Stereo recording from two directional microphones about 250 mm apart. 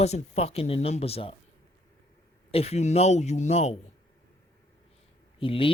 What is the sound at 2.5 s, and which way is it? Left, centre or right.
Speech, left.